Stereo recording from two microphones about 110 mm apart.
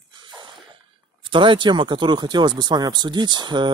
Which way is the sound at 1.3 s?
50° right (ahead or behind).